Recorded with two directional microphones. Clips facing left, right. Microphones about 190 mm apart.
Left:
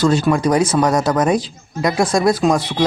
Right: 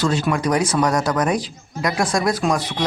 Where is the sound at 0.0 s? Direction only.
40° left (ahead or behind).